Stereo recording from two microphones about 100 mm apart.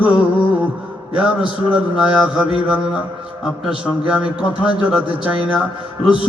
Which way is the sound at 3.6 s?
10° right (ahead or behind).